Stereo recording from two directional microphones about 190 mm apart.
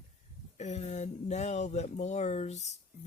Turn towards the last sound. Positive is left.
turn(degrees=35)  # may be behind; listen again after turning